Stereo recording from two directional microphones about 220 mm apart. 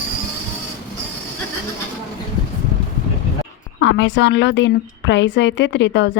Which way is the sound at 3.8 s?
55° left (ahead or behind).